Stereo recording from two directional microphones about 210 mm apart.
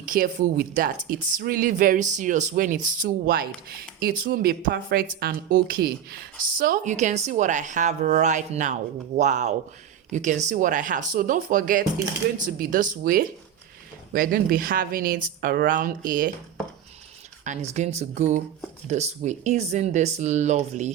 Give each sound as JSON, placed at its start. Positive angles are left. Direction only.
{"t": 0.1, "sound": "a woman's voice", "side_deg": -40}
{"t": 17.4, "sound": "a woman's voice", "side_deg": -35}